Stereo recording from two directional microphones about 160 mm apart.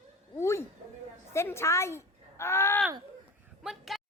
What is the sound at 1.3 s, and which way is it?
Speech, 15° left (ahead or behind).